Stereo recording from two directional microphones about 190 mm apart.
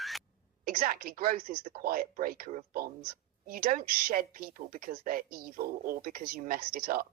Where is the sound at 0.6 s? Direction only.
50° right (ahead or behind).